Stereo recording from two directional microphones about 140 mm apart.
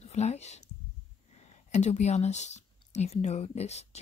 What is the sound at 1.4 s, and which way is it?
Speech, 55° left (ahead or behind).